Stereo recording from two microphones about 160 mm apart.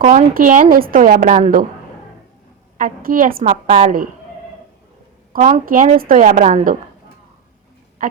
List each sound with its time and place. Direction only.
0.0 s a woman's voice: 50° right (ahead or behind)
2.7 s a woman's voice: 60° right (ahead or behind)
3.4 s a woman's voice: 40° right (ahead or behind)
5.3 s a woman's voice: 50° right (ahead or behind)